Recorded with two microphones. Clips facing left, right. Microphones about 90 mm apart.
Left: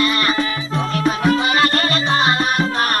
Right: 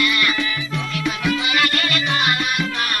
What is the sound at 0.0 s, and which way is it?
Music, 35° left (ahead or behind).